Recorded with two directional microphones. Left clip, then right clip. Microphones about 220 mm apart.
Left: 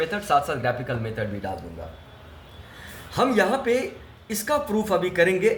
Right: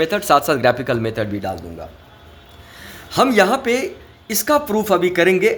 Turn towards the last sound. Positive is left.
turn(degrees=-45)  # may be behind; listen again after turning